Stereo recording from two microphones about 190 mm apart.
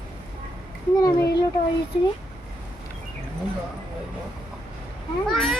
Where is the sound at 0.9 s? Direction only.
20° left (ahead or behind).